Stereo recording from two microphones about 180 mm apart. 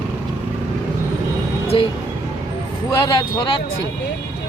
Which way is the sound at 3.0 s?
25° left (ahead or behind).